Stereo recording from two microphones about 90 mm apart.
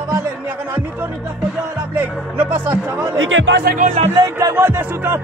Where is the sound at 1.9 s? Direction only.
25° right (ahead or behind).